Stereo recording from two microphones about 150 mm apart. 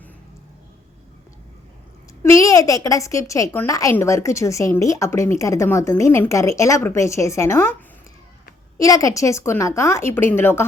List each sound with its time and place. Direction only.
2.3 s a woman's voice: 20° left (ahead or behind)
8.8 s a woman's voice: 20° left (ahead or behind)